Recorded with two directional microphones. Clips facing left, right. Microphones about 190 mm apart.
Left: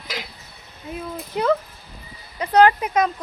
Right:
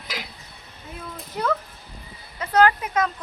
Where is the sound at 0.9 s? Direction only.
20° left (ahead or behind).